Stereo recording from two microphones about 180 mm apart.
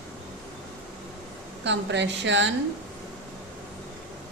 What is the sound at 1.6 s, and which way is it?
Speech, 80° right.